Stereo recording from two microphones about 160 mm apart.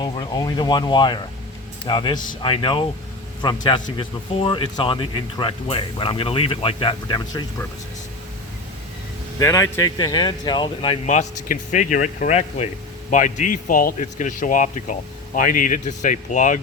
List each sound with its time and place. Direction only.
0.0 s speech: 25° left (ahead or behind)
9.4 s speech: 20° left (ahead or behind)
11.0 s speech: 50° left (ahead or behind)